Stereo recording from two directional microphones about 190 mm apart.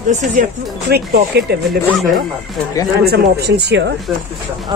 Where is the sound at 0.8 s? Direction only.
55° right (ahead or behind).